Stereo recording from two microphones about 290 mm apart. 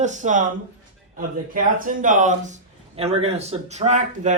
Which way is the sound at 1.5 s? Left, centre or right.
Right.